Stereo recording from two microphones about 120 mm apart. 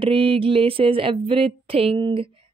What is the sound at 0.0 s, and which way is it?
Speech, 50° right (ahead or behind).